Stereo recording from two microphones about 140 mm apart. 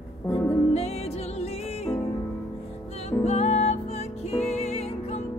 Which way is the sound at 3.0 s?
50° left (ahead or behind).